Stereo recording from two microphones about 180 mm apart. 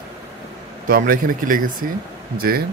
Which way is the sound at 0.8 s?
50° right (ahead or behind).